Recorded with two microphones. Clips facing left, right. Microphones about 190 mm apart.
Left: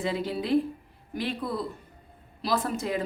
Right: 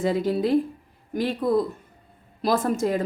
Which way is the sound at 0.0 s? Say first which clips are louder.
Right 7 dB; 45° right (ahead or behind).